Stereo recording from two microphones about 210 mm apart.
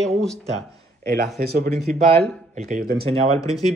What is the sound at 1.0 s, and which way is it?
Speech, 45° right (ahead or behind).